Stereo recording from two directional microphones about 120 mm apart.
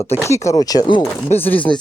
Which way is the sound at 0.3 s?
25° left (ahead or behind).